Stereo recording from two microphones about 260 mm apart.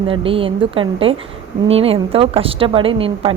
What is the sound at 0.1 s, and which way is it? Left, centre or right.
A woman's voice, right.